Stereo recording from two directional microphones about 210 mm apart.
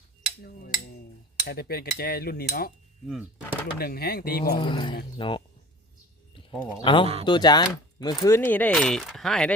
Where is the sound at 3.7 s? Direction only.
45° left (ahead or behind).